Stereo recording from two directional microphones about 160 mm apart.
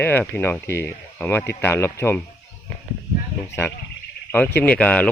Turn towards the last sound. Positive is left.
turn(degrees=10)  # may be behind; listen again after turning